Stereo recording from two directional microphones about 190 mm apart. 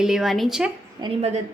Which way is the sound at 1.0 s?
35° right (ahead or behind).